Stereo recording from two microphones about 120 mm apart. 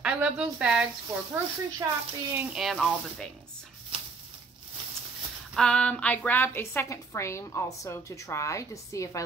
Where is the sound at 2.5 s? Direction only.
Centre (ahead or behind).